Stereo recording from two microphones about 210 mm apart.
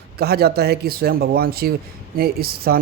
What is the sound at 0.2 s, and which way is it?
Speech, 50° right (ahead or behind).